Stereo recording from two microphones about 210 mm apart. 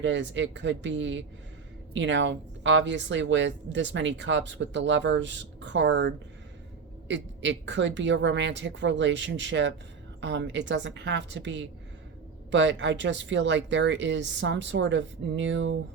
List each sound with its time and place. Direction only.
0.0 s a woman's voice: 60° right (ahead or behind)